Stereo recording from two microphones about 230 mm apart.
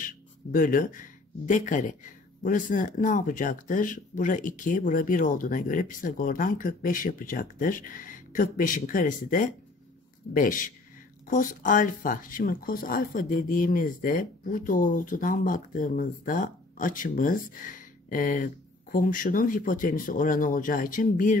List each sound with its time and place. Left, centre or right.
0.0 s speech: left